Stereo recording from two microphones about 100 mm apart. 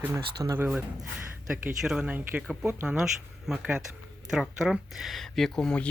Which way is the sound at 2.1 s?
15° right (ahead or behind).